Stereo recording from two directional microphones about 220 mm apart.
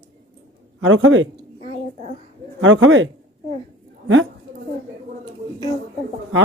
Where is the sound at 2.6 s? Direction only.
60° right (ahead or behind).